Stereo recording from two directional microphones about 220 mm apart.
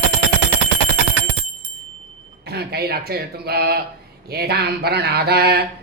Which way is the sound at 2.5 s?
45° right (ahead or behind).